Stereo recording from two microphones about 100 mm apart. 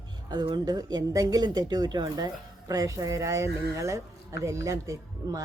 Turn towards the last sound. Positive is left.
turn(degrees=-35)  # may be behind; listen again after turning